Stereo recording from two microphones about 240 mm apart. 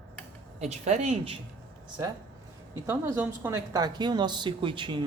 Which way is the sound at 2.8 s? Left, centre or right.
Centre.